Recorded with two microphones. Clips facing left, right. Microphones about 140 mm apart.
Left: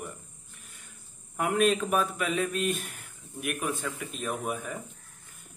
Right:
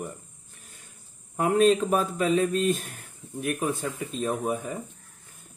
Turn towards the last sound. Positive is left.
turn(degrees=-30)  # may be behind; listen again after turning